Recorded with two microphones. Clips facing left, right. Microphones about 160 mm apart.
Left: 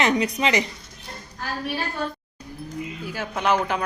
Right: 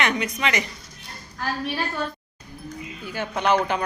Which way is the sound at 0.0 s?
30° left (ahead or behind).